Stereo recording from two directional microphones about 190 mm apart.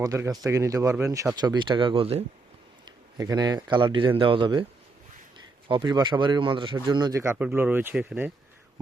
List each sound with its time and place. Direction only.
0.0 s a man's voice: 15° right (ahead or behind)
5.6 s speech: 25° right (ahead or behind); by 8.3 s 10° right (ahead or behind)